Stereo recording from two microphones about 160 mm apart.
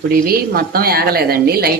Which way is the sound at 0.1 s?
70° right (ahead or behind).